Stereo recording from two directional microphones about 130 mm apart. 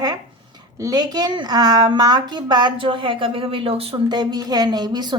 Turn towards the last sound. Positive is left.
turn(degrees=-35)  # may be behind; listen again after turning